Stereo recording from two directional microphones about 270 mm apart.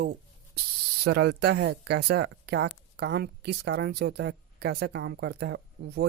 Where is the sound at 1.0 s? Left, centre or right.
Right.